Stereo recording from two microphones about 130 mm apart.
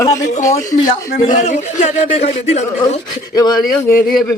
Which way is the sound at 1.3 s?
75° left (ahead or behind).